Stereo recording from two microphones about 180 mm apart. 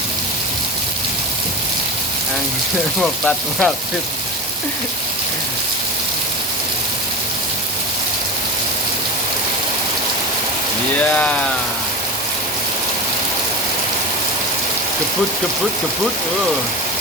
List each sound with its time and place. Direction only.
3.0 s sizzle: 5° left (ahead or behind)
10.9 s sizzle: 10° left (ahead or behind)